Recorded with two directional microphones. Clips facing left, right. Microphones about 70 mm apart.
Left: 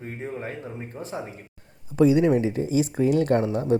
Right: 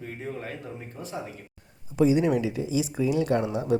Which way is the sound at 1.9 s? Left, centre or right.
Left.